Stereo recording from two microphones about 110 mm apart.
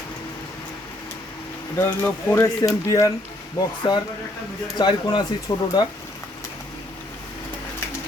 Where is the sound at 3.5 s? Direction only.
40° left (ahead or behind).